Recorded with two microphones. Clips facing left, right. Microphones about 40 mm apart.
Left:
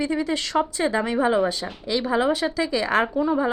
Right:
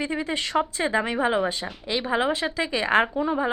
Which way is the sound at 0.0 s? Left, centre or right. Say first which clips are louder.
Left 3 dB; right.